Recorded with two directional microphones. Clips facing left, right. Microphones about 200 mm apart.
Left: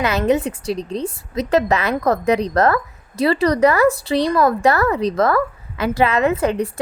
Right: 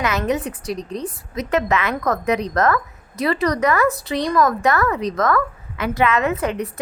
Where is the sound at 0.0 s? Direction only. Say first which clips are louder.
Left 4 dB; 30° left (ahead or behind).